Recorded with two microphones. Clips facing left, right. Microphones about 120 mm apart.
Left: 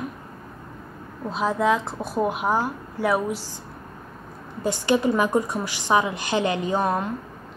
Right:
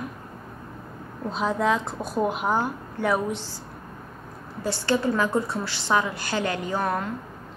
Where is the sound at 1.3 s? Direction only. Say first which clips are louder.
Left 2 dB; centre (ahead or behind).